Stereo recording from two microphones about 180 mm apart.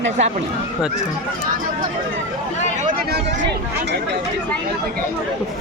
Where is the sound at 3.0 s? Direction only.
65° right (ahead or behind).